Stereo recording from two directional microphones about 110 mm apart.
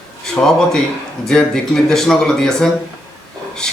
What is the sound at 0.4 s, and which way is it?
A man's voice, 15° left (ahead or behind).